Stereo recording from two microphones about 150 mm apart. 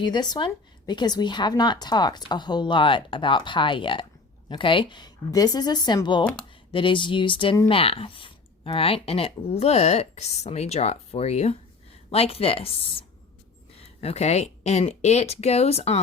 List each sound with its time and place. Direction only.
0.0 s a woman's voice: 30° left (ahead or behind)